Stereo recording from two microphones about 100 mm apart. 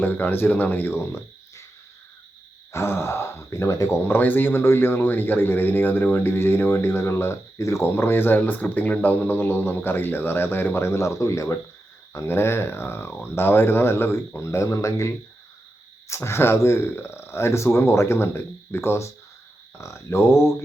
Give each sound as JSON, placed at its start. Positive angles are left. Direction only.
{"t": 0.0, "sound": "a man's voice", "side_deg": 20}
{"t": 2.7, "sound": "a man's voice", "side_deg": 25}
{"t": 4.1, "sound": "a man's voice", "side_deg": 20}